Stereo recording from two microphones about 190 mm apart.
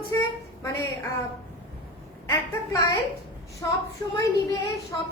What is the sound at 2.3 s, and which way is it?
Speech, 15° left (ahead or behind).